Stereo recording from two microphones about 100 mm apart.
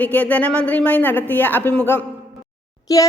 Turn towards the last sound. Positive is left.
turn(degrees=35)  # may be behind; listen again after turning